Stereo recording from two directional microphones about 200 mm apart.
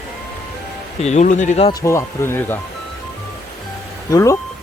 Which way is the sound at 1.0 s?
35° left (ahead or behind).